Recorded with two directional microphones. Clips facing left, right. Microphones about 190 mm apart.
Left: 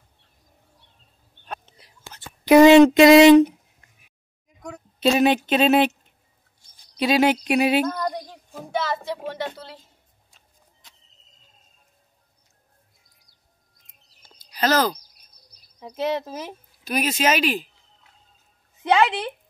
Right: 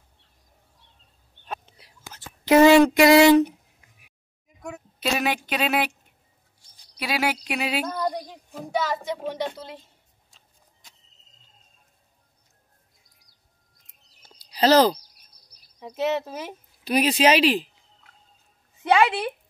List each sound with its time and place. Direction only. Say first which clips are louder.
1.4 s whispering: right 1 dB; 5° right (ahead or behind)
2.4 s speech: left 4 dB; 15° left (ahead or behind)
5.0 s speech: left 7 dB; 25° left (ahead or behind)
7.0 s speech: left 8 dB; 20° left (ahead or behind)
7.8 s a sound: left 2 dB; centre (ahead or behind)
8.7 s a woman's voice: even; 15° right (ahead or behind)
14.4 s a sound: right 4 dB; 35° right (ahead or behind)
15.8 s speech: even; 5° right (ahead or behind)
16.8 s speech: right 3 dB; 30° right (ahead or behind)
18.8 s a woman's voice: even; 10° right (ahead or behind)